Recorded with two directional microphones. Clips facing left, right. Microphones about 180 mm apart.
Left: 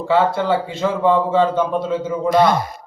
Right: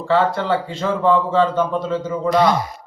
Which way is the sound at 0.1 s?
10° left (ahead or behind).